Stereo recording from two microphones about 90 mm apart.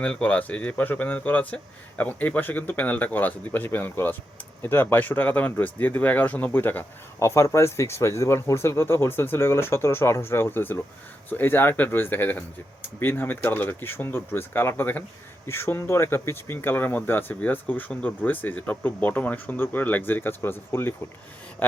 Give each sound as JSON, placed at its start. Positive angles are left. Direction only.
{"t": 0.0, "sound": "speech", "side_deg": 15}